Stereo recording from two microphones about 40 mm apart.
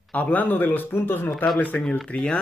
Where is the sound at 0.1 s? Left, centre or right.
Left.